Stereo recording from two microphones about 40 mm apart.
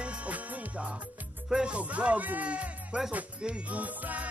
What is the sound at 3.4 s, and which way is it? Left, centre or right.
Music, right.